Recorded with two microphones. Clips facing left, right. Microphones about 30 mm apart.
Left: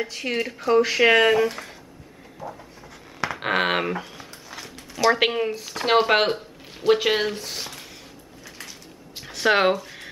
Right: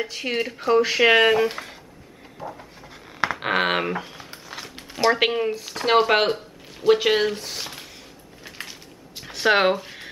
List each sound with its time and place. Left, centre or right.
0.0 s speech: centre
2.4 s dog: right
3.3 s speech: centre
9.2 s a sound: centre